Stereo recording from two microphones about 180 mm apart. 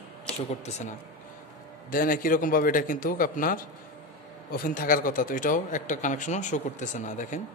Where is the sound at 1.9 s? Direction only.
50° left (ahead or behind).